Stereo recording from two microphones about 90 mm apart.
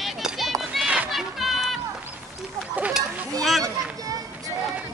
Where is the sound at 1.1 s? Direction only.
Centre (ahead or behind).